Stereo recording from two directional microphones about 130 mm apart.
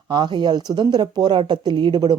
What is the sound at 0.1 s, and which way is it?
Speech, 35° right (ahead or behind).